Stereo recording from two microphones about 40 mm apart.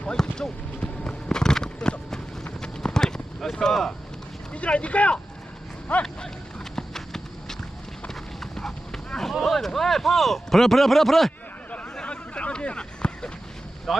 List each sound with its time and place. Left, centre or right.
0.0 s clip-clop: centre
4.5 s speech: left
6.7 s clip-clop: centre
9.4 s speech: centre
12.0 s a sound: left
13.9 s speech: centre